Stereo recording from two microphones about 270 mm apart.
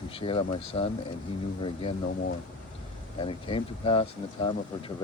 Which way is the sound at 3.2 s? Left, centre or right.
Centre.